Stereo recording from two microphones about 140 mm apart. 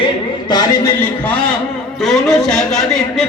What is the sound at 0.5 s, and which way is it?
Speech, 25° left (ahead or behind).